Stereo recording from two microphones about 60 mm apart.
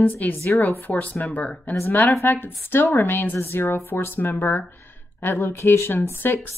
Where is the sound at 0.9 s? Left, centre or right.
Left.